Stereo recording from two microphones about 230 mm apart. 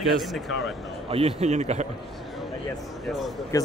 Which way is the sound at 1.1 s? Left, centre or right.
Right.